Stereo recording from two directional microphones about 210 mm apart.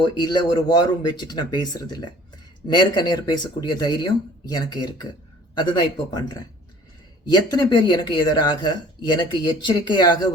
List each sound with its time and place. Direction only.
0.0 s speech: 20° left (ahead or behind)
7.3 s speech: 20° left (ahead or behind)